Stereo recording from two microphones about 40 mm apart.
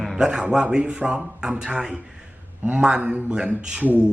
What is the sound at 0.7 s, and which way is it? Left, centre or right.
Speech, right.